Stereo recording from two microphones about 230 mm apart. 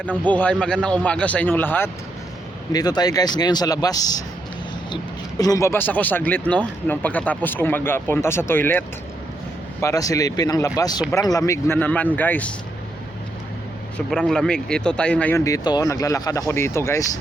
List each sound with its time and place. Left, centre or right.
0.3 s speech: centre
5.4 s speech: centre
9.8 s speech: centre
14.1 s speech: centre